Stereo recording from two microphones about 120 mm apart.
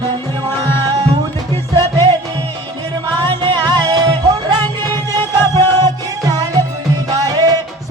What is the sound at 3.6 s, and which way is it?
Music, 35° right (ahead or behind).